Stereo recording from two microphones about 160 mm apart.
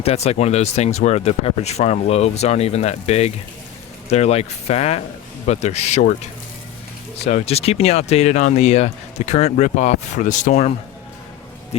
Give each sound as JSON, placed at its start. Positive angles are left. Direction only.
{"t": 0.0, "sound": "speech", "side_deg": 40}
{"t": 7.3, "sound": "speech", "side_deg": 45}